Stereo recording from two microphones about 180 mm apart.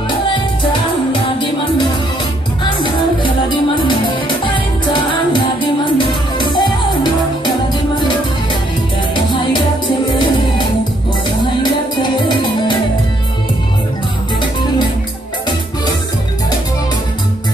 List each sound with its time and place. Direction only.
2.8 s music: 25° left (ahead or behind)
5.9 s music: 25° left (ahead or behind)
9.1 s music: 25° left (ahead or behind)
11.6 s music: 25° left (ahead or behind)